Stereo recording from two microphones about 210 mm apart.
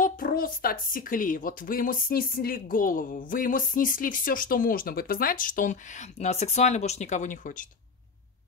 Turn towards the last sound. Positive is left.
turn(degrees=40)  # may be behind; listen again after turning